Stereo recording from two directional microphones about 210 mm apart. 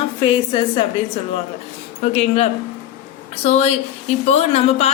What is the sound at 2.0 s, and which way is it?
Speech, 30° left (ahead or behind).